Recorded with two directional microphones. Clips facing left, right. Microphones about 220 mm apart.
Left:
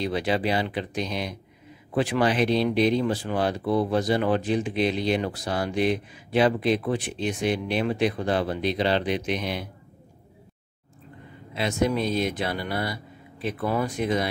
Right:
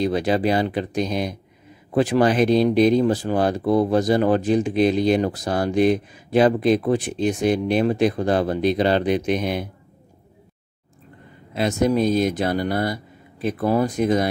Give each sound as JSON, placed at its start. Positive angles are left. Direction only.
{"t": 0.0, "sound": "speech", "side_deg": -45}
{"t": 11.5, "sound": "speech", "side_deg": -45}